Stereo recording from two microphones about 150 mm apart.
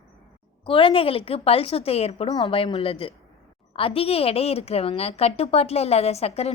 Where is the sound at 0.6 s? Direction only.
35° left (ahead or behind).